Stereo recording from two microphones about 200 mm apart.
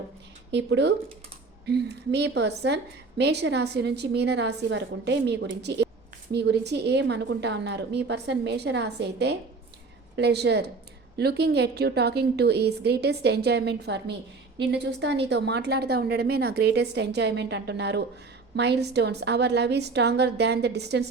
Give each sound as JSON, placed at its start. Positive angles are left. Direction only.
{"t": 0.5, "sound": "a woman's voice", "side_deg": -60}